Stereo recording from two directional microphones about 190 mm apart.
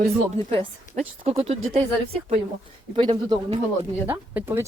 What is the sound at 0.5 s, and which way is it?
Speech, 30° right (ahead or behind).